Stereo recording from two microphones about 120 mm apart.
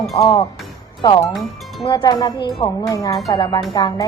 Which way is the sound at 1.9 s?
40° left (ahead or behind).